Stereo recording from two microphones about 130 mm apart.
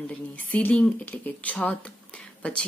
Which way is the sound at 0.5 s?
10° left (ahead or behind).